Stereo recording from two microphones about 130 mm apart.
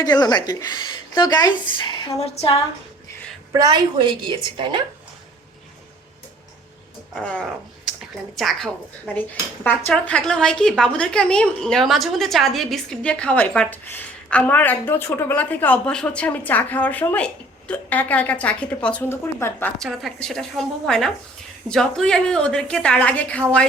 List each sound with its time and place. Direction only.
0.0 s speech: 30° left (ahead or behind)
2.2 s speech: 50° left (ahead or behind)
3.5 s a woman's voice: 30° right (ahead or behind)
7.2 s a woman's voice: 10° left (ahead or behind)
9.1 s speech: 15° left (ahead or behind)
19.8 s a woman's voice: centre (ahead or behind)